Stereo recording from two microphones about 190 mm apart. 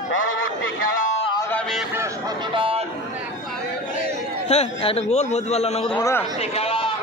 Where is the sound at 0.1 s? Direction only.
90° left.